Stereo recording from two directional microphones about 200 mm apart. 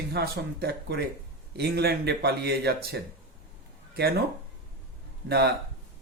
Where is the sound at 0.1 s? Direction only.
55° right (ahead or behind).